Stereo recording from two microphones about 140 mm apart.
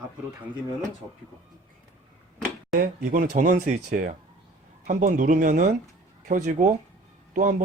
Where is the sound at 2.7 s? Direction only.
80° right.